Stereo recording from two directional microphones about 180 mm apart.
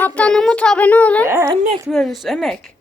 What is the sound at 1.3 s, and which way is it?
Speech, 15° right (ahead or behind).